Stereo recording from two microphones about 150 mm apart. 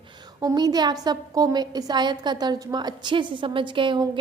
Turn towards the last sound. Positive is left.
turn(degrees=-35)  # may be behind; listen again after turning